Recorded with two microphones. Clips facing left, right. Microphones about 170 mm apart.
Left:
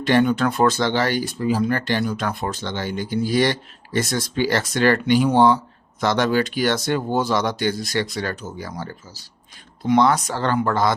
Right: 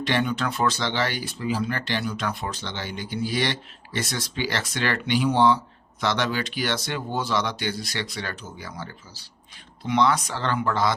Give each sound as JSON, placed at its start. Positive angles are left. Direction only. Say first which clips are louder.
{"t": 0.0, "sound": "speech", "louder": "left 7 dB", "side_deg": 45}